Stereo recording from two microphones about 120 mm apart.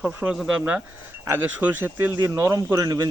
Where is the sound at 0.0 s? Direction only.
10° right (ahead or behind).